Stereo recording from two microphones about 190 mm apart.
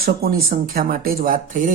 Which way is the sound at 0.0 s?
55° right (ahead or behind).